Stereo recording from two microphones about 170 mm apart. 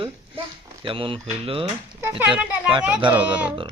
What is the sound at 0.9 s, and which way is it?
Speech, 30° right (ahead or behind).